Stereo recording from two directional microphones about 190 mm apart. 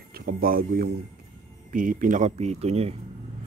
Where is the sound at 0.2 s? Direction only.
50° right (ahead or behind); by 2.9 s 35° right (ahead or behind).